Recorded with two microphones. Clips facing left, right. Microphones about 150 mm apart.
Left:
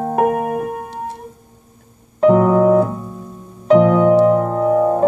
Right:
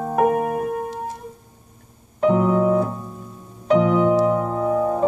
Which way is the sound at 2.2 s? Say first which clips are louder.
Left 6 dB; 45° left (ahead or behind).